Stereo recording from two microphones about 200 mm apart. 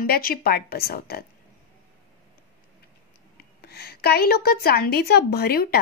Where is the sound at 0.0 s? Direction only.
50° left (ahead or behind).